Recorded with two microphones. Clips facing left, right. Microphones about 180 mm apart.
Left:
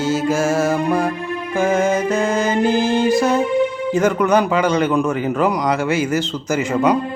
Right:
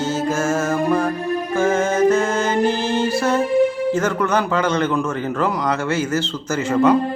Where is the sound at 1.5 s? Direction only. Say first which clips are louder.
Left 1 dB; 15° left (ahead or behind).